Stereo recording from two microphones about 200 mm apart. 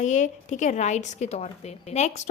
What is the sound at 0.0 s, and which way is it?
A woman's voice, 35° left (ahead or behind).